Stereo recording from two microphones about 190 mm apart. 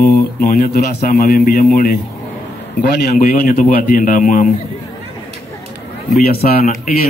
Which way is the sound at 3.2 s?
45° left (ahead or behind).